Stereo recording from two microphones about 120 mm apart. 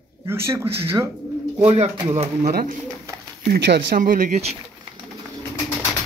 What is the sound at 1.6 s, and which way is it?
Speech, 55° right (ahead or behind).